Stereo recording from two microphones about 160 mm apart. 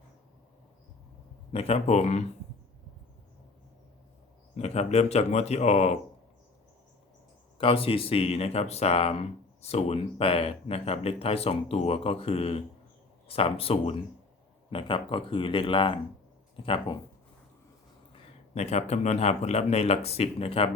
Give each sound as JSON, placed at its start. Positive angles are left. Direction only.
{"t": 1.5, "sound": "speech", "side_deg": 40}
{"t": 4.5, "sound": "speech", "side_deg": 45}
{"t": 7.6, "sound": "speech", "side_deg": 35}
{"t": 18.1, "sound": "speech", "side_deg": 45}